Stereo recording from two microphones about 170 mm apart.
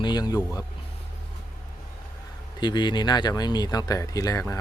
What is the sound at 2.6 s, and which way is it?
Speech, 25° left (ahead or behind).